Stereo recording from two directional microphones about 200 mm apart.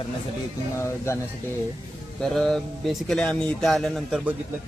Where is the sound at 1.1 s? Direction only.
15° left (ahead or behind).